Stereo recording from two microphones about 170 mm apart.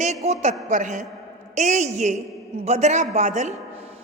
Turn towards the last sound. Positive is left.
turn(degrees=-45)  # may be behind; listen again after turning